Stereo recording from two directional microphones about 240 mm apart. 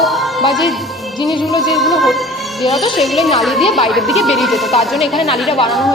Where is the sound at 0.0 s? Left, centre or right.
Centre.